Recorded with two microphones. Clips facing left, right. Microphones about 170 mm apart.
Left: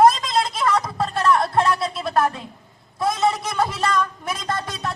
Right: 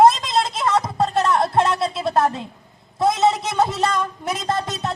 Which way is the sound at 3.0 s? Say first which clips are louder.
Right 3 dB; 25° right (ahead or behind).